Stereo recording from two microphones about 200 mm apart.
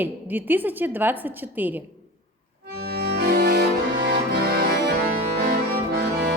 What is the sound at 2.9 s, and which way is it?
Accordion, 50° right (ahead or behind).